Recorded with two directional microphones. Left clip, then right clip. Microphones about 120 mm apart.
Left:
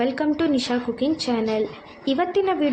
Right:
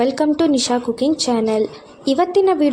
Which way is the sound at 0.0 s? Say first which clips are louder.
Right 6 dB; 45° right (ahead or behind).